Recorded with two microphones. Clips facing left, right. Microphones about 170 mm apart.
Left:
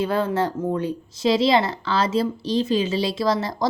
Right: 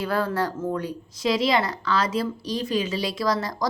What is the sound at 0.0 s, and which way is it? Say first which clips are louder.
Speech: left 3 dB; 20° left (ahead or behind).